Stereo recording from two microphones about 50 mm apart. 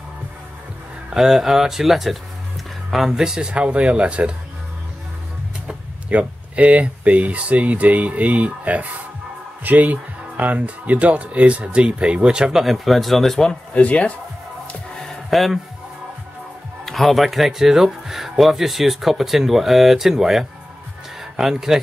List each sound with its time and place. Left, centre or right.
1.1 s speech: centre
3.2 s speech: centre
6.0 s speech: right
12.5 s speech: centre
13.7 s speech: left
15.2 s speech: centre
16.8 s speech: centre